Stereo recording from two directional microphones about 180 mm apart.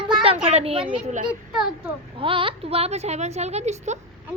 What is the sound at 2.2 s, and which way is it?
A woman's voice, 30° right (ahead or behind).